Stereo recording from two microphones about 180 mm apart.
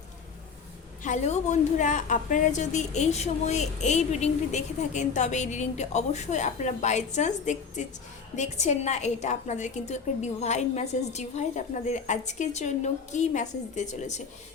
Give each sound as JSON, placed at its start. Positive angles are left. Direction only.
{"t": 1.0, "sound": "a woman's voice", "side_deg": 40}